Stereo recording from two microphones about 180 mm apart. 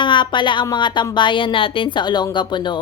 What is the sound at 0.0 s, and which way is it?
Speech, 25° left (ahead or behind).